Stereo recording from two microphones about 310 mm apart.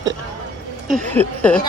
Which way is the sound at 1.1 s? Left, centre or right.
Centre.